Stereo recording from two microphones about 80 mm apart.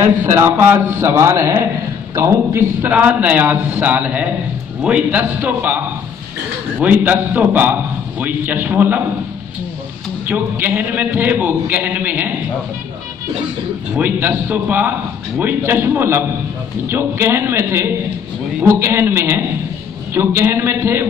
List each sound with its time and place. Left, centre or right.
0.3 s a man's voice: right
2.8 s a man's voice: centre
6.8 s a man's voice: centre
10.2 s a man's voice: right
13.9 s a man's voice: right